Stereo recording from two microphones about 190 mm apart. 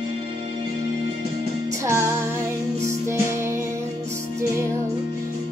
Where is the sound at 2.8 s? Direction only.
15° right (ahead or behind).